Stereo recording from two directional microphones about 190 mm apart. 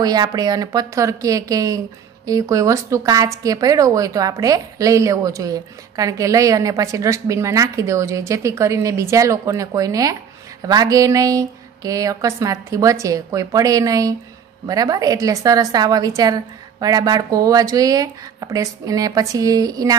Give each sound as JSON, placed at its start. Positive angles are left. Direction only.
{"t": 0.0, "sound": "a woman's voice", "side_deg": -20}